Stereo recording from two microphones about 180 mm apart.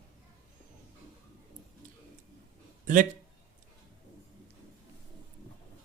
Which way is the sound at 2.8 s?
45° right (ahead or behind).